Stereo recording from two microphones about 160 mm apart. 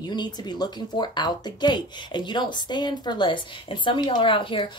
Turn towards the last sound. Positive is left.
turn(degrees=30)  # may be behind; listen again after turning